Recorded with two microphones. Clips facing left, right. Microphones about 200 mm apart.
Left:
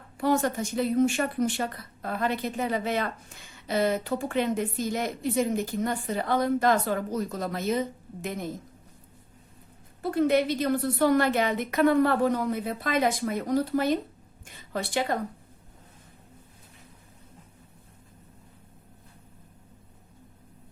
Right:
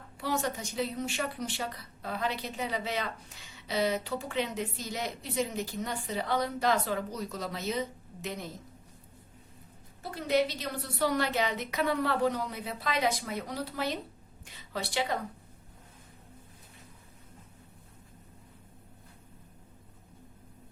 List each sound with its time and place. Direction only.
0.2 s speech: 50° left (ahead or behind)
10.0 s a woman's voice: 55° left (ahead or behind)